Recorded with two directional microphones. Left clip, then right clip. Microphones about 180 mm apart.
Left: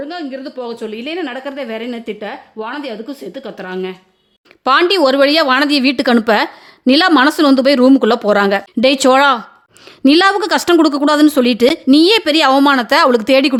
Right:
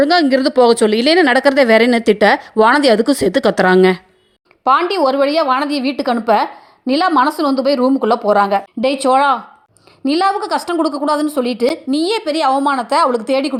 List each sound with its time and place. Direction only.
0.0 s speech: 40° right (ahead or behind)
4.6 s a woman's voice: 30° left (ahead or behind)